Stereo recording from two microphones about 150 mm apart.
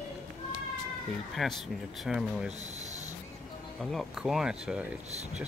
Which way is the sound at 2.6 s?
50° right (ahead or behind).